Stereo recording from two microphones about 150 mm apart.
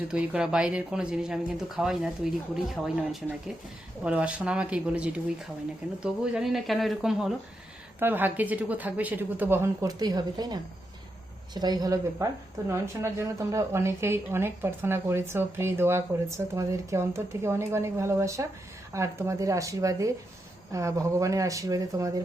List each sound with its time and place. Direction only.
0.1 s speech: 5° right (ahead or behind); by 22.1 s 20° right (ahead or behind)